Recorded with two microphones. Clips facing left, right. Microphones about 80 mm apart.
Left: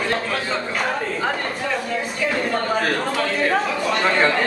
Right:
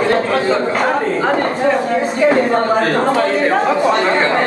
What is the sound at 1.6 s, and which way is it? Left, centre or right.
A man's voice, right.